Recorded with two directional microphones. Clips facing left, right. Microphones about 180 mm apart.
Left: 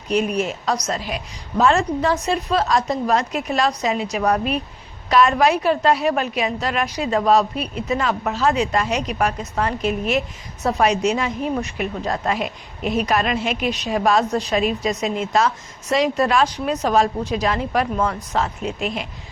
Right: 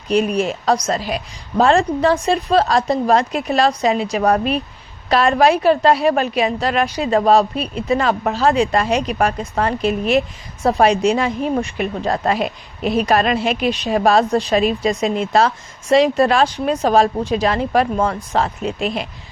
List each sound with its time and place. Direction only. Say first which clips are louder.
0.1 s a woman's voice: right 3 dB; 30° right (ahead or behind)